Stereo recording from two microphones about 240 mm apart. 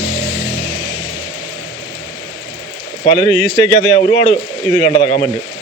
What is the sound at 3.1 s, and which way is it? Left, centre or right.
Speech, right.